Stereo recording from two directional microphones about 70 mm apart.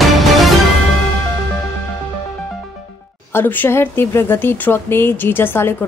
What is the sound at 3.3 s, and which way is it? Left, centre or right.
Speech, left.